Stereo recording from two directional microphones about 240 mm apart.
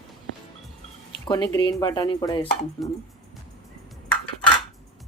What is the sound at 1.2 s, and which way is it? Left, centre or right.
Speech, centre.